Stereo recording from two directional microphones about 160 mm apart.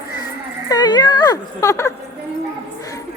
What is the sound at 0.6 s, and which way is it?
Speech, 25° left (ahead or behind).